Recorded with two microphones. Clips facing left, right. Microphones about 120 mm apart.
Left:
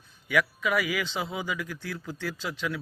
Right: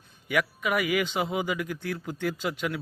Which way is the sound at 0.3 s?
50° right (ahead or behind).